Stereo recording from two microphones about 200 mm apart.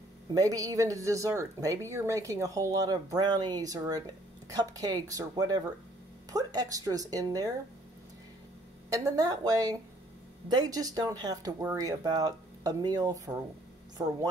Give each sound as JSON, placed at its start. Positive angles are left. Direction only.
{"t": 0.3, "sound": "speech", "side_deg": -20}
{"t": 8.9, "sound": "speech", "side_deg": -15}